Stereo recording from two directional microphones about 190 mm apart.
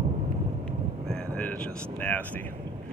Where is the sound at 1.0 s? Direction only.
5° left (ahead or behind).